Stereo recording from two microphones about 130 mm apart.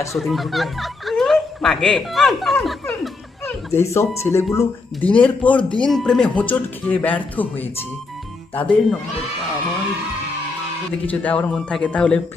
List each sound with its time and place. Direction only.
0.1 s speech: centre (ahead or behind)
3.4 s speech: 20° left (ahead or behind)
11.1 s speech: 10° left (ahead or behind)